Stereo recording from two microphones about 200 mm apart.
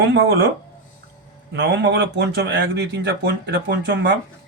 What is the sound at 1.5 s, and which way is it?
Speech, 60° right (ahead or behind).